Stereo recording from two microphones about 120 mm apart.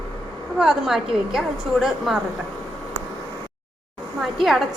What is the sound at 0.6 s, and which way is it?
A woman's voice, 5° right (ahead or behind).